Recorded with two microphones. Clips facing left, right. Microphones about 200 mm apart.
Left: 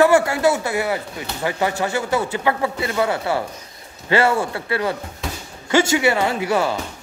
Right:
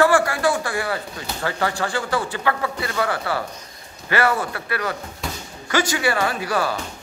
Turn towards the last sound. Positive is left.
turn(degrees=20)  # may be behind; listen again after turning